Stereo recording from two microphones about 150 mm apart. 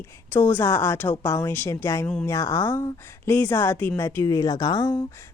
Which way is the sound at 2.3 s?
20° left (ahead or behind).